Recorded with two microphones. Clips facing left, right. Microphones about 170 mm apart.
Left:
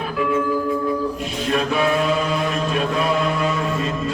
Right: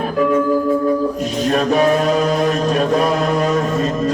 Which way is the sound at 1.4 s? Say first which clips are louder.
Right 5 dB; 40° right (ahead or behind).